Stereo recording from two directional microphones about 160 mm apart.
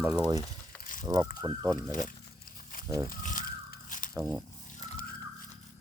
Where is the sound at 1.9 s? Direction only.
55° left (ahead or behind).